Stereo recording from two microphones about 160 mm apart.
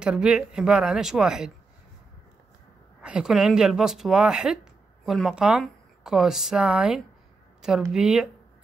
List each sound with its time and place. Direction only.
0.0 s speech: 5° right (ahead or behind)
3.0 s speech: 5° right (ahead or behind)